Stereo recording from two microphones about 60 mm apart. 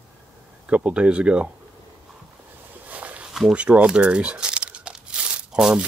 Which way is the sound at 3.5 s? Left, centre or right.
Right.